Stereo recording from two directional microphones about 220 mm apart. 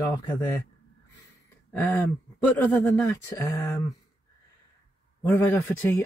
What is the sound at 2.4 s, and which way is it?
Speech, 10° left (ahead or behind).